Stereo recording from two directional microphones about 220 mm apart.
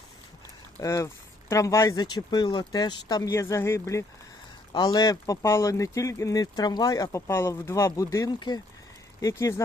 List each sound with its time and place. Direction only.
0.8 s speech: 15° left (ahead or behind)